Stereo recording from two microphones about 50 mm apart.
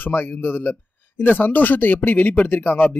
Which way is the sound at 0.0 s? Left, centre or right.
Left.